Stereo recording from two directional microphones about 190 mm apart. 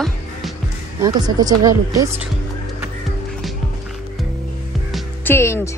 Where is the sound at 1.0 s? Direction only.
20° right (ahead or behind).